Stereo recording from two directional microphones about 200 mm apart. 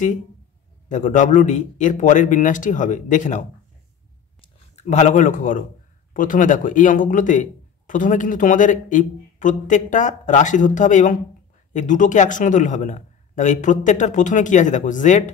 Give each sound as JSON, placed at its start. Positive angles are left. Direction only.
{"t": 0.8, "sound": "speech", "side_deg": 40}